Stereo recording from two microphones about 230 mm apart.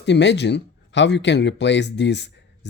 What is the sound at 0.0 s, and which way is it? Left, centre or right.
Speech, left.